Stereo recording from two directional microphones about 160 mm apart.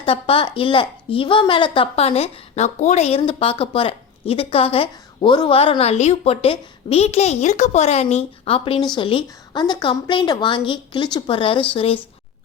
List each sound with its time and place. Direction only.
0.0 s a woman's voice: 35° left (ahead or behind)